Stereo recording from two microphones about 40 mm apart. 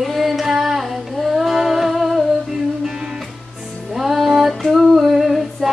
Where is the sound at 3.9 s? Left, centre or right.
Centre.